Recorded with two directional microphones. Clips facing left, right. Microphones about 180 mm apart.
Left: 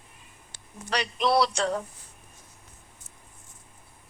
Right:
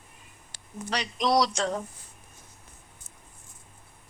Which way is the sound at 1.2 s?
15° right (ahead or behind).